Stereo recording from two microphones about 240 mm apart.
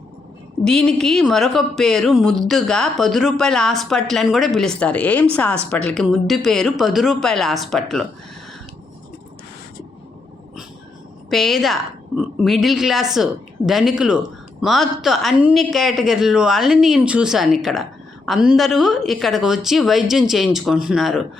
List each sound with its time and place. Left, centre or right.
0.6 s speech: centre
11.3 s speech: centre